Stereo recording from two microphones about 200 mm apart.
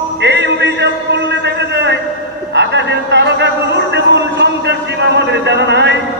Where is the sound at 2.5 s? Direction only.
60° right (ahead or behind).